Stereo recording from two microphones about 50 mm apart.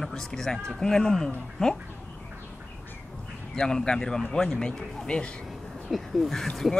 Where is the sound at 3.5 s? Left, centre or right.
Centre.